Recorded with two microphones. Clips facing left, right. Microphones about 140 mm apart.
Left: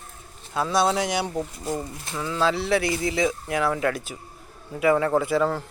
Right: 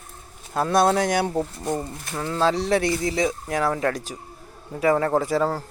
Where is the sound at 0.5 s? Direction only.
50° right (ahead or behind).